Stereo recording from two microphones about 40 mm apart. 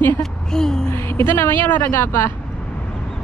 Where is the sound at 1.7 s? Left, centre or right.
Left.